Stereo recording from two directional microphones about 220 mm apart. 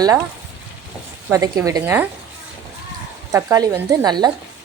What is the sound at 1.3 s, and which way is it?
Speech, 15° right (ahead or behind).